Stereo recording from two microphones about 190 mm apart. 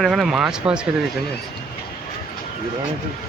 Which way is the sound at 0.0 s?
Centre (ahead or behind).